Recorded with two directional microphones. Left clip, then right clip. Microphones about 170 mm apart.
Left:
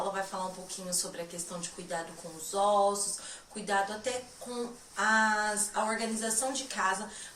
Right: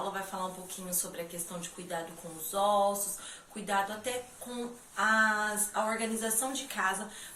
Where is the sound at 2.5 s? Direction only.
5° right (ahead or behind).